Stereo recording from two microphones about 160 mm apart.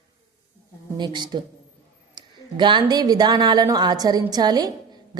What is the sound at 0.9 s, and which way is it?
A woman's voice, 25° right (ahead or behind).